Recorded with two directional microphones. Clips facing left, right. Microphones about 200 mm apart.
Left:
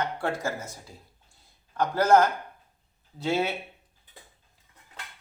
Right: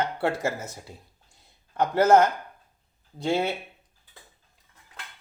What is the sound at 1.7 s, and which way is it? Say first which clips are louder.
Speech: right 2 dB; 20° right (ahead or behind).